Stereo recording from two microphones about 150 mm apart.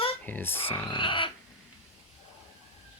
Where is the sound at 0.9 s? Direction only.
30° left (ahead or behind).